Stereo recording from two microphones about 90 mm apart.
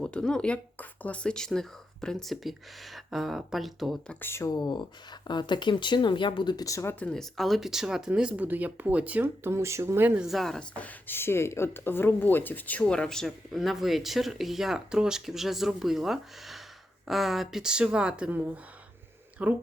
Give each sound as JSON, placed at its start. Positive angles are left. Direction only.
{"t": 0.0, "sound": "speech", "side_deg": 10}
{"t": 4.2, "sound": "speech", "side_deg": 25}
{"t": 4.4, "sound": "speech", "side_deg": 50}
{"t": 6.7, "sound": "speech", "side_deg": 35}
{"t": 7.0, "sound": "speech", "side_deg": 5}
{"t": 9.2, "sound": "speech", "side_deg": -30}
{"t": 10.2, "sound": "speech", "side_deg": 0}
{"t": 10.8, "sound": "speech", "side_deg": 20}
{"t": 12.8, "sound": "speech", "side_deg": 10}